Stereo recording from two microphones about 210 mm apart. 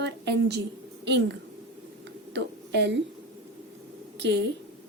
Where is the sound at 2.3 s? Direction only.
55° right (ahead or behind).